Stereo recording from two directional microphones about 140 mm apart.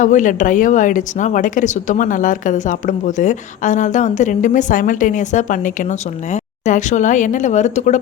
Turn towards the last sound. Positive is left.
turn(degrees=55)  # may be behind; listen again after turning